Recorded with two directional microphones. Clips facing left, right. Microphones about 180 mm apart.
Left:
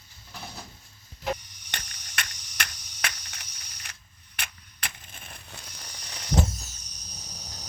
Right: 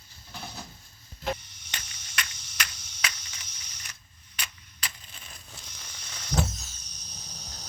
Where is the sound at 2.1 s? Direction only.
55° left (ahead or behind).